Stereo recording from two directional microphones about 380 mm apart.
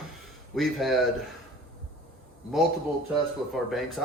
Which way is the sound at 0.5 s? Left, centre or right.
Centre.